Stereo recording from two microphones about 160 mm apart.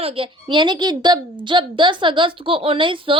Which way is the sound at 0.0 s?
35° right (ahead or behind).